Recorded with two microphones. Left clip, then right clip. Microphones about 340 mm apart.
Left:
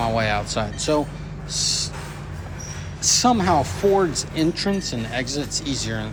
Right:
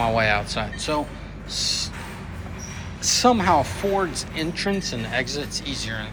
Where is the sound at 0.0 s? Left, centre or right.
Centre.